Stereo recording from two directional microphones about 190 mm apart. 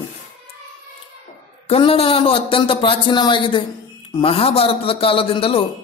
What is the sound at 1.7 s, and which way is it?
A man's voice, 30° left (ahead or behind).